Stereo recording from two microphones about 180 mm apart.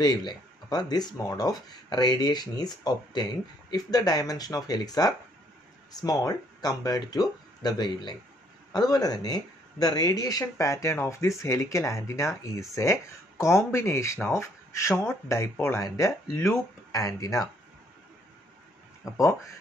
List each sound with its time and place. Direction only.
0.0 s speech: 25° left (ahead or behind)
19.1 s speech: 15° left (ahead or behind)